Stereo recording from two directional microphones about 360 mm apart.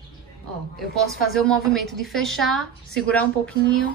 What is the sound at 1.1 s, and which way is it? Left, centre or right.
A woman's voice, centre.